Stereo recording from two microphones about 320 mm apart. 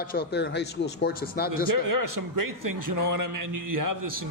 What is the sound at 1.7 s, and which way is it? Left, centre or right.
A man's voice, right.